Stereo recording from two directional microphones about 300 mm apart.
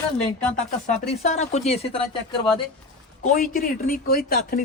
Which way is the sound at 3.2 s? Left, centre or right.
Left.